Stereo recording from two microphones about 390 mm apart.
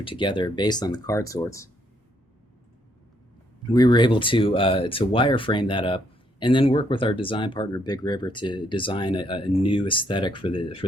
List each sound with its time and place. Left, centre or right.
0.0 s speech: centre
3.7 s speech: centre